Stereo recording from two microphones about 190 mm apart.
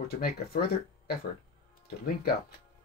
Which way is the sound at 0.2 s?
55° left (ahead or behind).